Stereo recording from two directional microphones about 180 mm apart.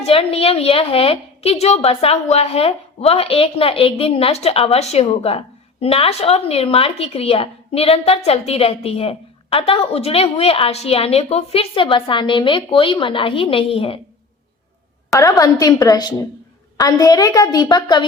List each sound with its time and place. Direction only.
0.0 s a woman's voice: 35° left (ahead or behind)
15.1 s a woman's voice: 20° left (ahead or behind)